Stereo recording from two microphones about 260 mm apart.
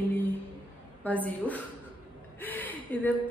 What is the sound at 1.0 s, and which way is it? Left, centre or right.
A woman's voice, centre.